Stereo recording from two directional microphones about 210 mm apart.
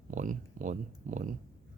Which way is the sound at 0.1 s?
35° right (ahead or behind).